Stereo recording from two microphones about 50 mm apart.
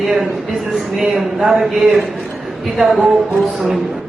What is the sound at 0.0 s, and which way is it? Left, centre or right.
Speech, centre.